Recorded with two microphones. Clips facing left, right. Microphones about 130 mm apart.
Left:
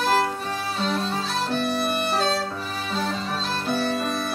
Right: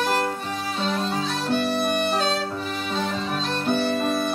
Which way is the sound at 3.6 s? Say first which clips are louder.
Right 3 dB; 5° left (ahead or behind).